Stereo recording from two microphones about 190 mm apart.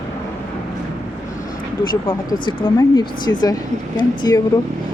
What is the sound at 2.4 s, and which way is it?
Speech, 25° left (ahead or behind).